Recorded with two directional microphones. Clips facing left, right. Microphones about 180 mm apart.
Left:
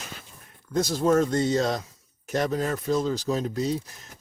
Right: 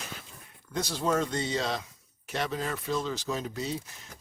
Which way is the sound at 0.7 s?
45° left (ahead or behind).